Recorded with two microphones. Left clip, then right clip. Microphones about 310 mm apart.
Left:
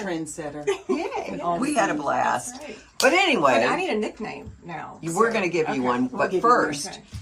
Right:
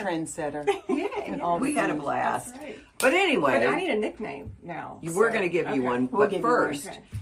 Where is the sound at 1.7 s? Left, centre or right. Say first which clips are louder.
Left 4 dB; left.